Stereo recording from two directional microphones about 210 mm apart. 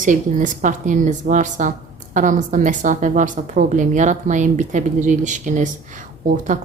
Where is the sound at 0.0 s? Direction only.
35° right (ahead or behind).